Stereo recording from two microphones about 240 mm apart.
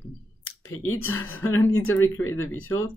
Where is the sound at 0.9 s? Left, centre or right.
Left.